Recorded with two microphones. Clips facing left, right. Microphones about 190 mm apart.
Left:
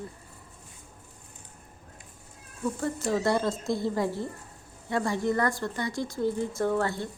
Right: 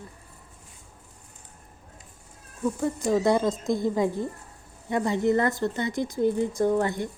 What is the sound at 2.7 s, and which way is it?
A woman's voice, 15° right (ahead or behind).